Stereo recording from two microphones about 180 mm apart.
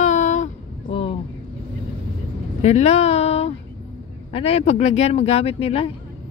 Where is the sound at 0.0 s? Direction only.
40° left (ahead or behind).